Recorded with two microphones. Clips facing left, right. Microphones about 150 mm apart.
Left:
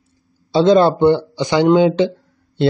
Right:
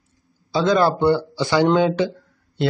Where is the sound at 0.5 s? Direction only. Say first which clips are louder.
Left 6 dB; 30° left (ahead or behind).